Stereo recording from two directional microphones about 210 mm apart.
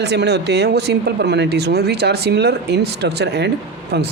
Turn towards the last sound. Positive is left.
turn(degrees=-55)  # may be behind; listen again after turning